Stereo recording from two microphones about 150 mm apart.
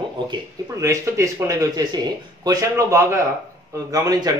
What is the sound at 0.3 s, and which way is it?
Speech, 20° right (ahead or behind).